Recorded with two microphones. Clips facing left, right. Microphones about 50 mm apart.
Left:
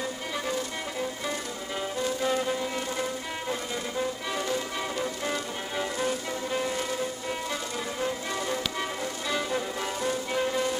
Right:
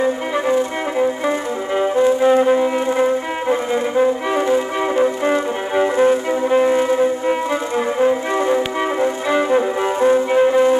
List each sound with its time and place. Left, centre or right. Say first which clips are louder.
0.0 s music: right 14 dB; right